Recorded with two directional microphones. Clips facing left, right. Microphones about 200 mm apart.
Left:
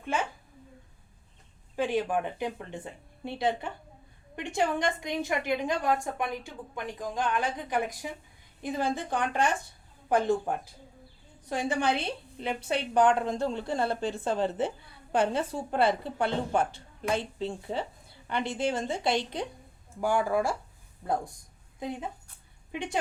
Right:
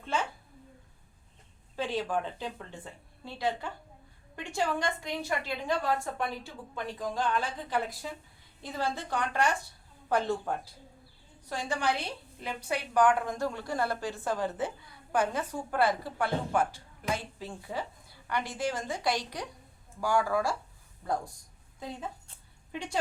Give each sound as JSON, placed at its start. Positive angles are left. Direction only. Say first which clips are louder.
{"t": 0.0, "sound": "speech", "louder": "left 2 dB", "side_deg": 15}
{"t": 1.7, "sound": "a woman's voice", "louder": "left 4 dB", "side_deg": 15}
{"t": 11.7, "sound": "a woman's voice", "louder": "left 1 dB", "side_deg": 20}
{"t": 21.8, "sound": "a woman's voice", "louder": "left 4 dB", "side_deg": 20}